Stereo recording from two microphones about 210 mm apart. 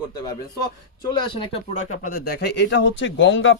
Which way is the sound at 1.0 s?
20° left (ahead or behind).